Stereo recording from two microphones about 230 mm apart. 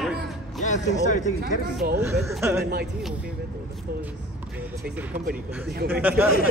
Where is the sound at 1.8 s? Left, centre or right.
Right.